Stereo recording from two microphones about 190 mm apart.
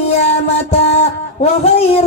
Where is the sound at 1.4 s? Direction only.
35° left (ahead or behind).